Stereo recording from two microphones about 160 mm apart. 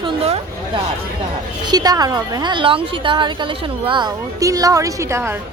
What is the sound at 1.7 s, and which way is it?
A woman's voice, 25° right (ahead or behind).